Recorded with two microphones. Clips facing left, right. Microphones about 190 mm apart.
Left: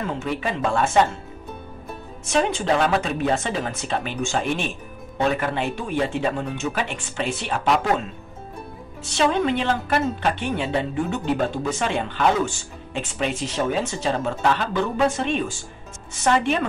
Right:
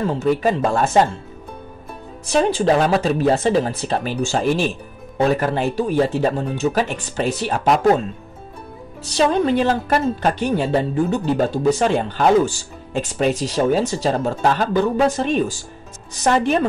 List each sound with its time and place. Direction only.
0.0 s a woman's voice: 35° right (ahead or behind)
2.2 s a woman's voice: 35° right (ahead or behind)
9.0 s a woman's voice: 40° right (ahead or behind)